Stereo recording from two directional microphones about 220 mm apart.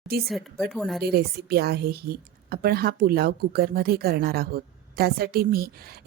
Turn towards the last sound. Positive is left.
turn(degrees=-45)  # may be behind; listen again after turning